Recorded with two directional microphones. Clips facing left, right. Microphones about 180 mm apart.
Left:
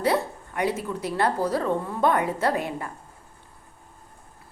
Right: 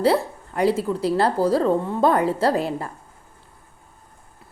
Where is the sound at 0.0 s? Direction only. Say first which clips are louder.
Right 4 dB; 30° right (ahead or behind).